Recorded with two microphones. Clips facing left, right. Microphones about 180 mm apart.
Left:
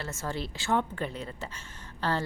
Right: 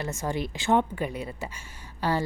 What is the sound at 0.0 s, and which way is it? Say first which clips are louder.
A woman's voice: right 5 dB; 15° right (ahead or behind).